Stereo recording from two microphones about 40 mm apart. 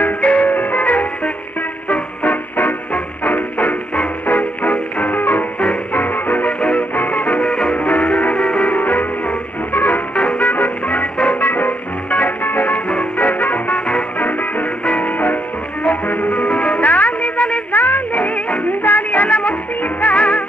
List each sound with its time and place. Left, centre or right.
0.0 s music: left
7.4 s music: left
7.8 s music: left
11.3 s music: left
17.7 s music: left
18.8 s music: left